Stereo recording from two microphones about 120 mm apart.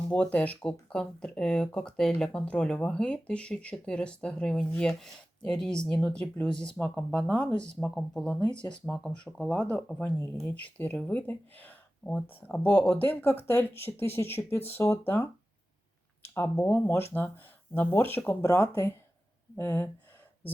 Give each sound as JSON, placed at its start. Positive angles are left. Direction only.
{"t": 0.1, "sound": "speech", "side_deg": 10}